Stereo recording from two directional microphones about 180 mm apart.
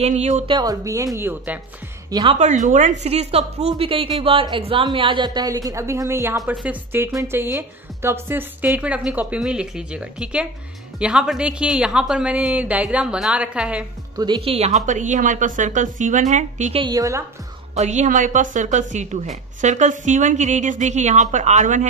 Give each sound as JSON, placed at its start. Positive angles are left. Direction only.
{"t": 0.0, "sound": "a woman's voice", "side_deg": -40}
{"t": 0.5, "sound": "a woman's voice", "side_deg": -20}
{"t": 2.0, "sound": "a woman's voice", "side_deg": -25}
{"t": 2.3, "sound": "a woman's voice", "side_deg": -40}
{"t": 14.1, "sound": "a woman's voice", "side_deg": -25}
{"t": 16.8, "sound": "a woman's voice", "side_deg": -20}
{"t": 17.7, "sound": "a woman's voice", "side_deg": -40}